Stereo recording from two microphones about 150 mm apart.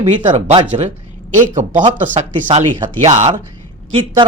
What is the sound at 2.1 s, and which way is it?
Speech, 50° right (ahead or behind).